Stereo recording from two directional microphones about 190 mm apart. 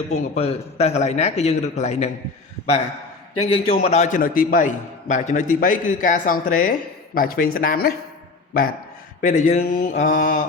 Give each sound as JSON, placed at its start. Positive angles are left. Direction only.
{"t": 0.1, "sound": "a man's voice", "side_deg": 35}
{"t": 3.4, "sound": "a man's voice", "side_deg": 30}
{"t": 9.2, "sound": "a man's voice", "side_deg": 40}